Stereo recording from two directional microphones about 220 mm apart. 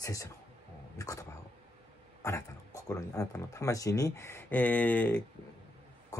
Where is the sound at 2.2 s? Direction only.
15° left (ahead or behind).